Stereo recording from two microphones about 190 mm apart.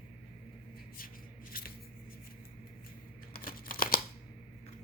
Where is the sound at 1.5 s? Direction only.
50° left (ahead or behind).